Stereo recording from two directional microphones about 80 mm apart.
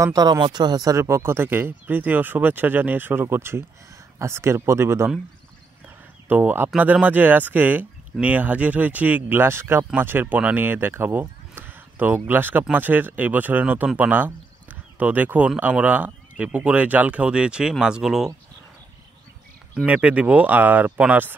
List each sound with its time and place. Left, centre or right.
0.0 s speech: right
0.9 s speech: right
6.2 s speech: right; by 18.3 s centre
19.9 s speech: centre